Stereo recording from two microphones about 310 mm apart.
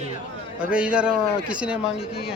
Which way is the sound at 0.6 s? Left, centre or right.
Centre.